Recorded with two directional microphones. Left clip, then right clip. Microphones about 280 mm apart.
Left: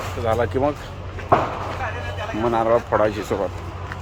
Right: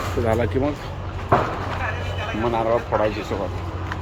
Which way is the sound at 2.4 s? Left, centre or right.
Left.